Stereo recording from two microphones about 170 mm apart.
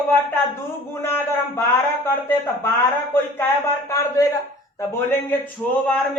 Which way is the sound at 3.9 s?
20° left (ahead or behind).